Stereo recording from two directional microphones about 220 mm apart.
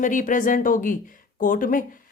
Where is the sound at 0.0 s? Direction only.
35° left (ahead or behind).